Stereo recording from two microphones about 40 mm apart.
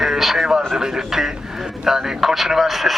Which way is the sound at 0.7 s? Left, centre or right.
Centre.